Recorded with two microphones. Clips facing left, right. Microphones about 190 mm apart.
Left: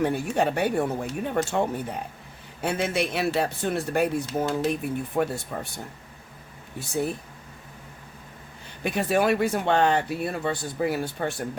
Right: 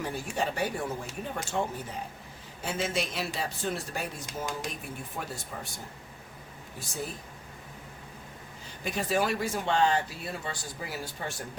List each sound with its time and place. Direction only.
0.0 s speech: 60° left (ahead or behind)
8.6 s speech: 60° left (ahead or behind)